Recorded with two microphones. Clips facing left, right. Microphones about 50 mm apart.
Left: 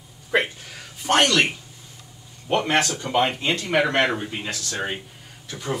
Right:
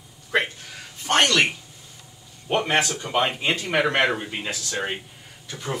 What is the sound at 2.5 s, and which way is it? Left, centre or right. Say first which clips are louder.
Speech: left 1 dB; centre.